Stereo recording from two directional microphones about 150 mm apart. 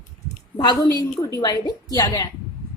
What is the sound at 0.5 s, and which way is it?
A woman's voice, 30° left (ahead or behind).